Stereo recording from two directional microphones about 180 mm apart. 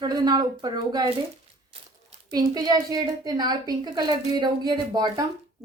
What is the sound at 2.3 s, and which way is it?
A woman's voice, 20° right (ahead or behind).